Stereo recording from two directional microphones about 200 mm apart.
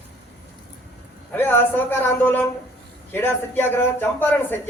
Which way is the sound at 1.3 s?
10° left (ahead or behind).